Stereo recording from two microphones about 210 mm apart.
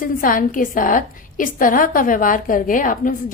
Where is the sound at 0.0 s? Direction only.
40° left (ahead or behind).